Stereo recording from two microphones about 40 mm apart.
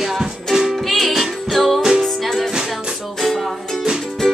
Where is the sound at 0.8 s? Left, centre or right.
Centre.